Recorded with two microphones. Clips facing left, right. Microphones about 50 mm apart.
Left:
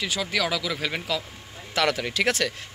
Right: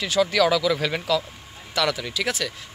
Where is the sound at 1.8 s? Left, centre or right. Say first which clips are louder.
Left 1 dB; left.